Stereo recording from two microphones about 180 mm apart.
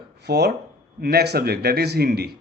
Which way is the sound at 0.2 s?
65° right (ahead or behind).